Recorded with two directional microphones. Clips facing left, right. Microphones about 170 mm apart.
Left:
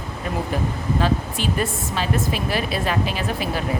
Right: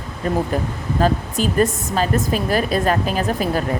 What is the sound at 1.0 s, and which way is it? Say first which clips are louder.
Speech: right 6 dB; 40° right (ahead or behind).